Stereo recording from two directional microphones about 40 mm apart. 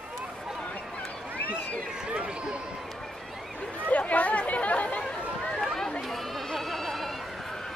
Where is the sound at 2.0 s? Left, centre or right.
Right.